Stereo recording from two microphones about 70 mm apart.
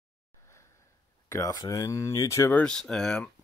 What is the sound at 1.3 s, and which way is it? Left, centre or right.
Speech, left.